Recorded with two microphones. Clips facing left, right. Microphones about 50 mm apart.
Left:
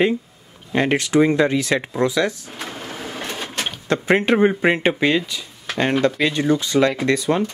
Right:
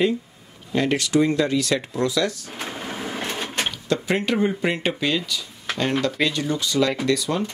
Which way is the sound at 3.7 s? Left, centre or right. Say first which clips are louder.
Left 7 dB; left.